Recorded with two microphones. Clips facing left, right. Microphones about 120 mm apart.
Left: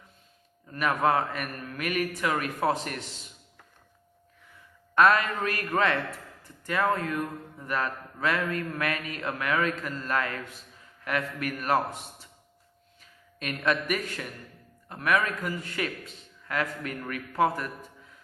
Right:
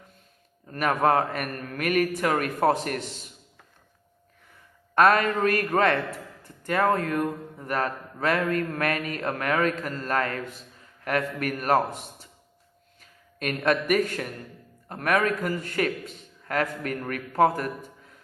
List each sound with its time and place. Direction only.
0.7 s speech: 45° right (ahead or behind)
4.9 s speech: 45° right (ahead or behind)
13.0 s a man's voice: 45° right (ahead or behind)